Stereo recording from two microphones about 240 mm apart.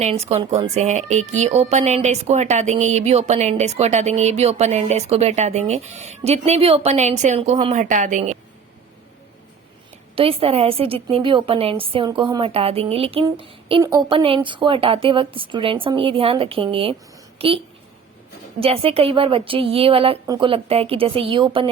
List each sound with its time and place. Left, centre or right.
0.0 s speech: right
10.2 s a woman's voice: right
18.6 s speech: right